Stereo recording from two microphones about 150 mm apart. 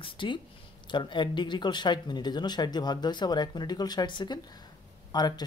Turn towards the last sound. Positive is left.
turn(degrees=30)  # may be behind; listen again after turning